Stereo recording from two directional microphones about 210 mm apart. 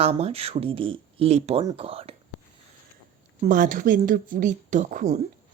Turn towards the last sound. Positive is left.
turn(degrees=-35)  # may be behind; listen again after turning